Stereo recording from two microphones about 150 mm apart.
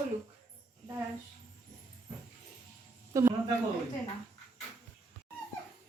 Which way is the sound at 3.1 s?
20° right (ahead or behind).